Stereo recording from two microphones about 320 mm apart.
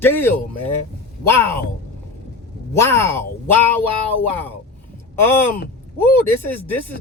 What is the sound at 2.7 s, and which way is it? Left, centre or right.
Speech, centre.